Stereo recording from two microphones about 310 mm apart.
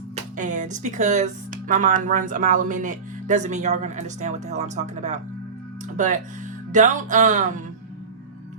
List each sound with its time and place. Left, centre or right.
0.3 s speech: right